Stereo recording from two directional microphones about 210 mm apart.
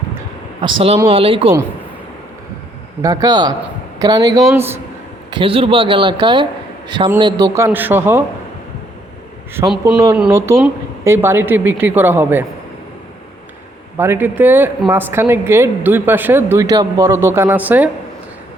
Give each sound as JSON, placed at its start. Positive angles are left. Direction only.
{"t": 0.6, "sound": "a man's voice", "side_deg": -25}
{"t": 3.0, "sound": "a man's voice", "side_deg": -15}
{"t": 5.3, "sound": "a man's voice", "side_deg": -25}
{"t": 9.6, "sound": "speech", "side_deg": -5}
{"t": 13.9, "sound": "speech", "side_deg": -10}